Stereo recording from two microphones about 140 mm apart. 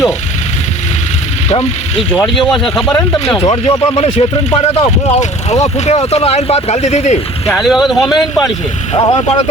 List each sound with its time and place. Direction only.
1.5 s speech: 50° left (ahead or behind)
2.2 s speech: centre (ahead or behind)
3.4 s speech: 45° left (ahead or behind)
7.5 s speech: 5° right (ahead or behind)
9.0 s speech: 35° left (ahead or behind)